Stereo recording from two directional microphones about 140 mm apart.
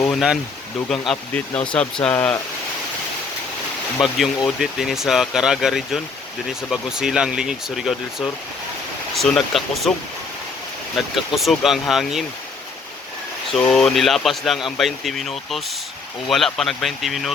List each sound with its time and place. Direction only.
0.1 s speech: 5° right (ahead or behind)
1.3 s speech: 10° left (ahead or behind)
2.1 s speech: 20° left (ahead or behind)
4.0 s speech: 5° right (ahead or behind)
11.0 s speech: centre (ahead or behind)
13.5 s speech: 5° left (ahead or behind)